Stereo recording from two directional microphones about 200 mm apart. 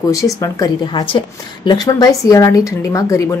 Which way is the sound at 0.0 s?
15° left (ahead or behind).